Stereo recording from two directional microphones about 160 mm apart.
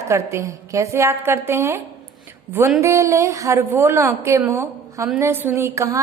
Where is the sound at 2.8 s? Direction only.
20° right (ahead or behind).